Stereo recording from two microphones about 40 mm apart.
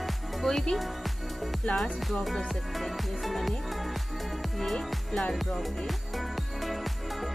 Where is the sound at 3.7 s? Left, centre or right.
Centre.